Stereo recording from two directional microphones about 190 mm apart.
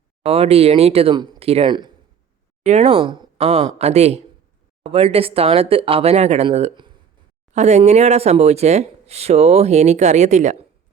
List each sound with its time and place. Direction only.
0.2 s speech: 30° right (ahead or behind)
2.6 s speech: 35° right (ahead or behind)